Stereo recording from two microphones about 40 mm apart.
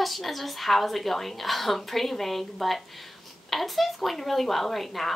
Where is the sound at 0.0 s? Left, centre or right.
Centre.